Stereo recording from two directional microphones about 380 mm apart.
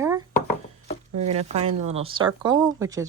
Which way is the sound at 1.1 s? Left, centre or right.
Centre.